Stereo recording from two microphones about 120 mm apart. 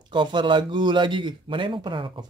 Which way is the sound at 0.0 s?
40° right (ahead or behind).